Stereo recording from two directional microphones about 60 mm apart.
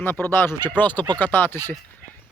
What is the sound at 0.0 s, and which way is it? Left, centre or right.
Speech, left.